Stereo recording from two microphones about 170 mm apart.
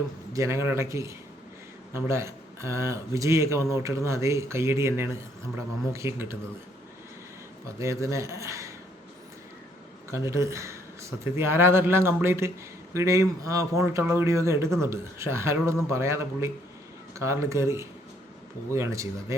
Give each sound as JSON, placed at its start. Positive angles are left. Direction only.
{"t": 0.3, "sound": "speech", "side_deg": -15}
{"t": 7.8, "sound": "speech", "side_deg": -15}
{"t": 10.1, "sound": "speech", "side_deg": -15}